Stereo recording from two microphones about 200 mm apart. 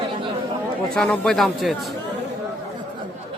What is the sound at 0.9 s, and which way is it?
Speech, 5° left (ahead or behind).